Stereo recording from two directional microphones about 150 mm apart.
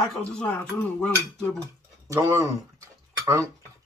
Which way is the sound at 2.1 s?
20° right (ahead or behind).